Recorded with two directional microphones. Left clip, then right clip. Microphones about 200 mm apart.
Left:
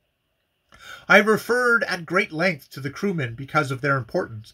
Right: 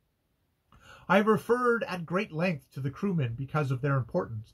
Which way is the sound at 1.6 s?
15° left (ahead or behind).